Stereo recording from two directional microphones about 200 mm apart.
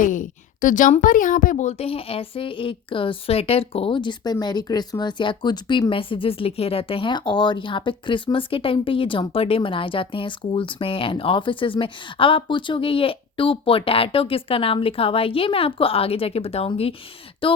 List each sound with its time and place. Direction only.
0.0 s a woman's voice: 40° left (ahead or behind)